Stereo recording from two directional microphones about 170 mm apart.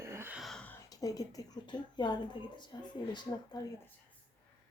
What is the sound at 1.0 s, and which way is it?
Speech, 20° left (ahead or behind).